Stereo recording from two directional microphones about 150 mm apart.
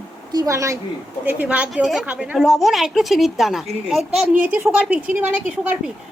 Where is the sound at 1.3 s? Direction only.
10° right (ahead or behind).